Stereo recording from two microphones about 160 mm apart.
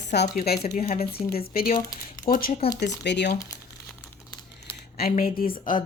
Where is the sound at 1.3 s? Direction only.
70° left (ahead or behind).